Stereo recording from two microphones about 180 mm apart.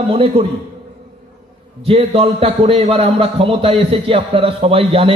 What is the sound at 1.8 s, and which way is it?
A man's voice, 30° right (ahead or behind).